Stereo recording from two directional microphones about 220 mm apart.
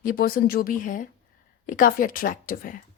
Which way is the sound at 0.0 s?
40° left (ahead or behind).